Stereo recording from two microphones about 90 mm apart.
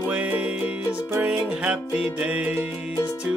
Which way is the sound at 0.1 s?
15° right (ahead or behind).